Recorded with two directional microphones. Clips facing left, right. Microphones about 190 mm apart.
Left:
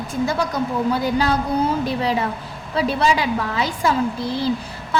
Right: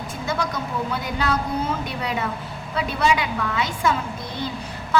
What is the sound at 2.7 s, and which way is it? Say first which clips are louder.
A woman's voice: left 3 dB; 35° left (ahead or behind).